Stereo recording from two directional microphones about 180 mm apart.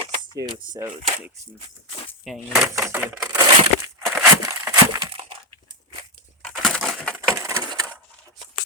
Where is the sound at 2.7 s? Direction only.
15° right (ahead or behind).